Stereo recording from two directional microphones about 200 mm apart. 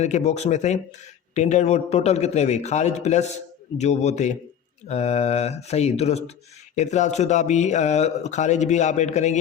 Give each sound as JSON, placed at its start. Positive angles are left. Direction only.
{"t": 0.0, "sound": "speech", "side_deg": 35}